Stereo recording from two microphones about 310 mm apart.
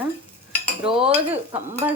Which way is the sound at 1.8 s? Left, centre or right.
Centre.